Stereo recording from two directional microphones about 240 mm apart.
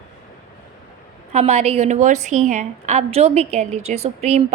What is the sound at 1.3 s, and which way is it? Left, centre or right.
A woman's voice, right.